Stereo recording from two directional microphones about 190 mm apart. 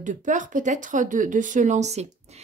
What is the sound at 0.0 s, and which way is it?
Speech, 40° right (ahead or behind).